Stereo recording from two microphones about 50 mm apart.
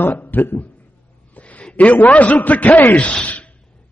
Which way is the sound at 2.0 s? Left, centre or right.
Left.